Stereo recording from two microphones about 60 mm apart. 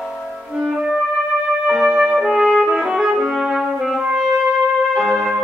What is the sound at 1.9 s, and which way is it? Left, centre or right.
Music, centre.